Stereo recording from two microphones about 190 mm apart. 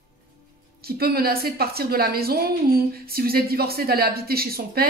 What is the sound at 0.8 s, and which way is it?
A woman's voice, 55° right (ahead or behind).